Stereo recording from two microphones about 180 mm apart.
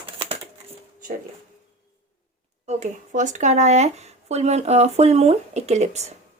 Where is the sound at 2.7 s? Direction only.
40° right (ahead or behind).